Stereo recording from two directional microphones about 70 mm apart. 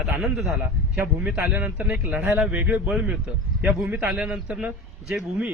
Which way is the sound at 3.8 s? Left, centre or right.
Right.